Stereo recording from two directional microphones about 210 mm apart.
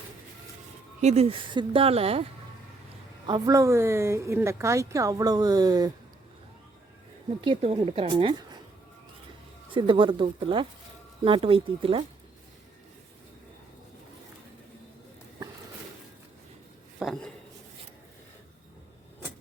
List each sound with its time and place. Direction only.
1.0 s speech: 30° right (ahead or behind)
3.2 s a woman's voice: 20° right (ahead or behind)
7.4 s speech: 25° right (ahead or behind)
9.7 s speech: 25° right (ahead or behind)
17.0 s a sound: centre (ahead or behind)